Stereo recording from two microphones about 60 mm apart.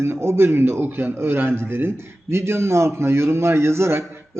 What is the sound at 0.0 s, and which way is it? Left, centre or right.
A man's voice, right.